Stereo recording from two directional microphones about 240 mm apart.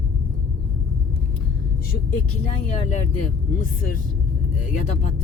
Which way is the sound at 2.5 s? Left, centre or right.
Left.